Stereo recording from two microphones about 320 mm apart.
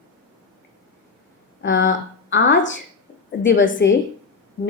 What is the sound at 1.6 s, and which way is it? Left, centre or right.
A woman's voice, left.